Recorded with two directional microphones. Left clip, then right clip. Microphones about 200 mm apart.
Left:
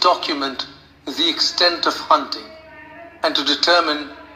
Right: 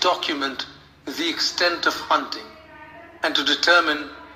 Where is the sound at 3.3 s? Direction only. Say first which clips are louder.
Left 2 dB; 10° left (ahead or behind).